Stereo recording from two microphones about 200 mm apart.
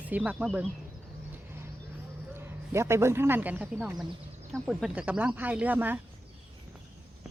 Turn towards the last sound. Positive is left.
turn(degrees=-10)  # may be behind; listen again after turning